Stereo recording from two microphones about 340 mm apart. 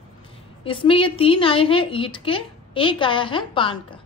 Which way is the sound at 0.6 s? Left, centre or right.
Centre.